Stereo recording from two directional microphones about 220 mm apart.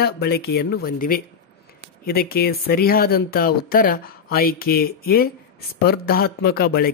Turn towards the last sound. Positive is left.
turn(degrees=45)  # may be behind; listen again after turning